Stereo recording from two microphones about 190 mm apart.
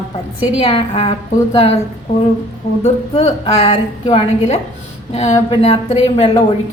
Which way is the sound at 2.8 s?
35° left (ahead or behind).